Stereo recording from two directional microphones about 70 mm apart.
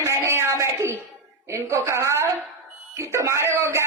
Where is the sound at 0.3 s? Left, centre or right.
Right.